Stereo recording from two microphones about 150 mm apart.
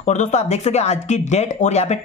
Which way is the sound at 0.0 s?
50° left (ahead or behind).